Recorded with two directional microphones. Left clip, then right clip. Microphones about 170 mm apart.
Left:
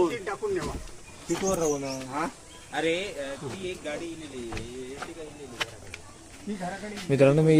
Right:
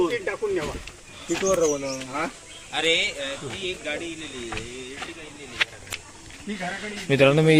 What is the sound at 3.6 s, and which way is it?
Speech, 50° left (ahead or behind).